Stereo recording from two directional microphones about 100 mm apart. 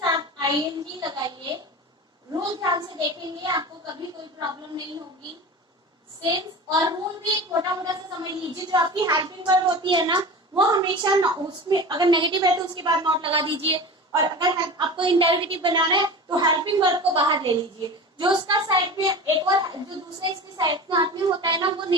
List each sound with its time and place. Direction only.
0.0 s child singing: 45° right (ahead or behind)
2.3 s a woman's voice: 45° right (ahead or behind)
6.2 s a woman's voice: 45° right (ahead or behind)
13.3 s a woman's voice: 60° right (ahead or behind)
14.1 s a woman's voice: 45° right (ahead or behind)
15.5 s a woman's voice: 45° right (ahead or behind)